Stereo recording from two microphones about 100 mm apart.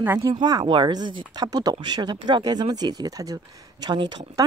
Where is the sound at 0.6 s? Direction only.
55° right (ahead or behind); by 3.9 s 40° right (ahead or behind).